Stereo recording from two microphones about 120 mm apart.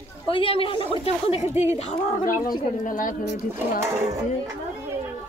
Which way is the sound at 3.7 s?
20° right (ahead or behind).